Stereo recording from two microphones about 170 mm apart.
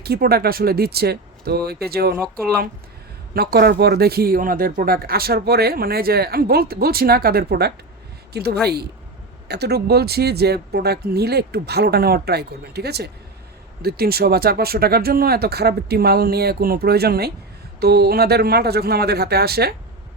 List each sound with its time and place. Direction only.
0.0 s speech: 65° right (ahead or behind)
3.3 s speech: 65° right (ahead or behind)